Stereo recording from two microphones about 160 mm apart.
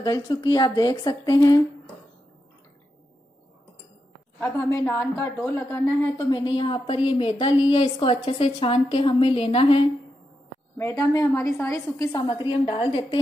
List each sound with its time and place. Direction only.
0.0 s a woman's voice: 25° left (ahead or behind)
4.4 s speech: 15° left (ahead or behind)
6.1 s a woman's voice: 30° left (ahead or behind)
10.8 s a woman's voice: 20° left (ahead or behind)